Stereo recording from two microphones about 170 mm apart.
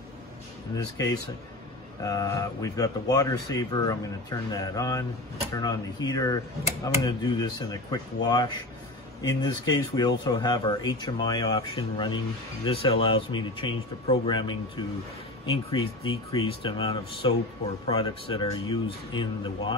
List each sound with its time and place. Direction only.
2.0 s speech: 20° left (ahead or behind)